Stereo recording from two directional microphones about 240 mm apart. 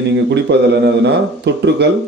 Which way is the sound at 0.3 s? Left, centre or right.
Right.